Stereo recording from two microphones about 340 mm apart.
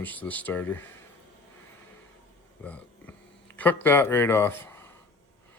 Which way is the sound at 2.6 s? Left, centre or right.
Centre.